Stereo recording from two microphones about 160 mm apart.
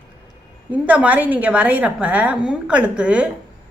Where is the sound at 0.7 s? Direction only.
10° right (ahead or behind).